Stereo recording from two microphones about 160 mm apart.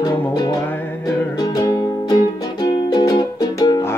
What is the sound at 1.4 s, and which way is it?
Music, 25° left (ahead or behind).